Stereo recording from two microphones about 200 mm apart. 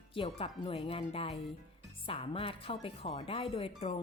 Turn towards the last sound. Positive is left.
turn(degrees=30)  # may be behind; listen again after turning